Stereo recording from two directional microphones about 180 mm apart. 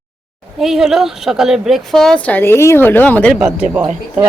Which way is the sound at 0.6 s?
Centre (ahead or behind).